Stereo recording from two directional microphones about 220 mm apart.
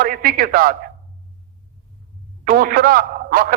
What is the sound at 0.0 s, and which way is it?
Speech, 40° right (ahead or behind).